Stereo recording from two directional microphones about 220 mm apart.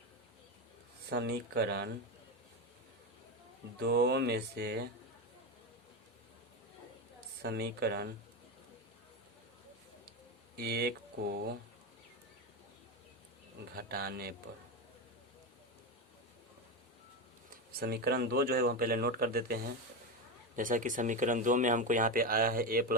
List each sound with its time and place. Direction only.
1.1 s speech: 45° right (ahead or behind)
3.8 s speech: 50° right (ahead or behind)
7.4 s speech: 45° right (ahead or behind)
10.6 s speech: 45° right (ahead or behind)
13.7 s speech: 45° right (ahead or behind)
17.5 s speech: 45° right (ahead or behind)